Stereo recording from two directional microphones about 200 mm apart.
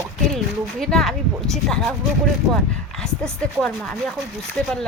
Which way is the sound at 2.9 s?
5° left (ahead or behind).